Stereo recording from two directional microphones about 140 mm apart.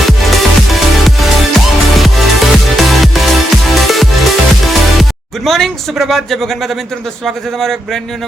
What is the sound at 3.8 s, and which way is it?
Music, centre (ahead or behind).